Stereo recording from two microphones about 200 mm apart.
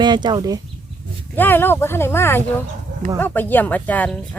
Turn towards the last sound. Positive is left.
turn(degrees=5)  # may be behind; listen again after turning